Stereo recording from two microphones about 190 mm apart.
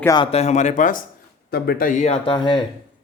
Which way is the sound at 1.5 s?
55° left (ahead or behind).